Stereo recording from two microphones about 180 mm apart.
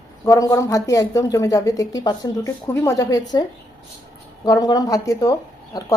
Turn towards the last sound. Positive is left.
turn(degrees=20)  # may be behind; listen again after turning